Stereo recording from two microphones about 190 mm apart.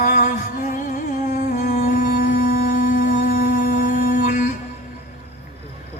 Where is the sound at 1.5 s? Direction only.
40° left (ahead or behind).